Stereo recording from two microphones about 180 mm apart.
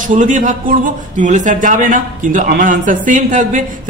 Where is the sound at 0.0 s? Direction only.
45° right (ahead or behind).